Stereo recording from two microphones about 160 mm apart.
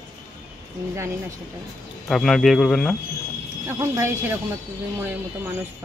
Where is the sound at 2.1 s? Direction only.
Centre (ahead or behind).